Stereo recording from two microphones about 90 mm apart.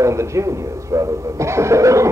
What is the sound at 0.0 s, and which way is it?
Speech, 35° right (ahead or behind).